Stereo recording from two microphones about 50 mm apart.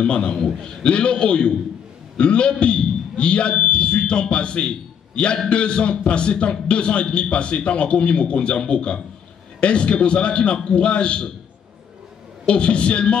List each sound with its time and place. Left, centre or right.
0.0 s a man's voice: left
12.4 s a man's voice: left